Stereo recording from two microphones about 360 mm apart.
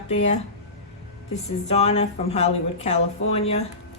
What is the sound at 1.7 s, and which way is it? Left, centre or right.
Speech, centre.